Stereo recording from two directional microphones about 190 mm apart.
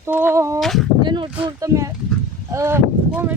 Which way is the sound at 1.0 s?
25° right (ahead or behind).